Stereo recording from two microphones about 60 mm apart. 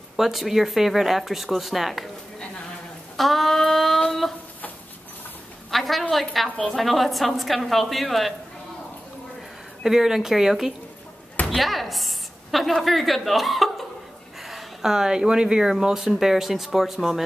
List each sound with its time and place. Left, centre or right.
0.1 s speech: centre
3.2 s female singing: centre
5.7 s a woman's voice: centre
9.8 s a woman's voice: centre